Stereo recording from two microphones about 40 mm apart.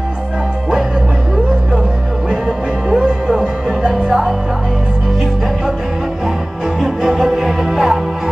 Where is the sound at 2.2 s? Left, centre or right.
Centre.